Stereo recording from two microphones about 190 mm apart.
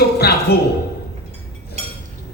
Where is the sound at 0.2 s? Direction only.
55° left (ahead or behind).